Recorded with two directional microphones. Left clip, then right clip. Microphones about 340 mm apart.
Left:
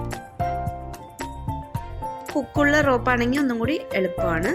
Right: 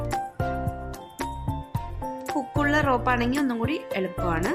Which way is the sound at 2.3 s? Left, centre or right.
Centre.